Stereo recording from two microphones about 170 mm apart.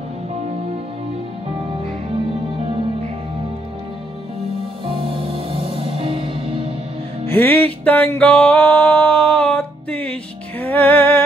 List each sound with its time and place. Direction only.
4.8 s music: 30° right (ahead or behind)
7.2 s music: 10° left (ahead or behind)